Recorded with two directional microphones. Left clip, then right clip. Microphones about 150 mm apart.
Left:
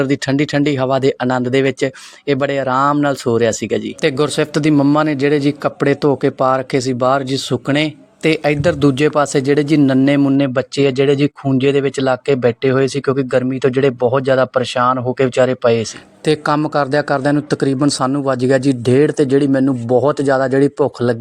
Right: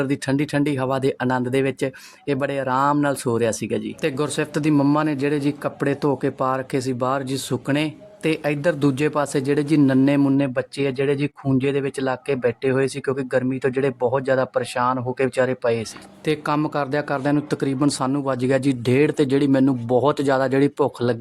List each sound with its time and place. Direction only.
0.0 s speech: 25° left (ahead or behind)
4.7 s a man's voice: 15° left (ahead or behind)
4.9 s speech: 25° left (ahead or behind)
16.2 s a woman's voice: 35° left (ahead or behind)